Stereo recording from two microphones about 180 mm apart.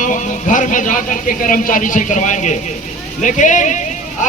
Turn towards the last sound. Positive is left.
turn(degrees=45)  # may be behind; listen again after turning